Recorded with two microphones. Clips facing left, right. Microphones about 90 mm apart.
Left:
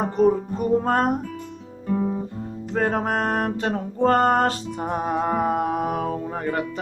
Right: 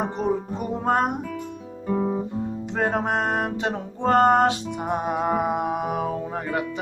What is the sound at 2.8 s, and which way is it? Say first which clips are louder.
Music: left 1 dB; 10° right (ahead or behind).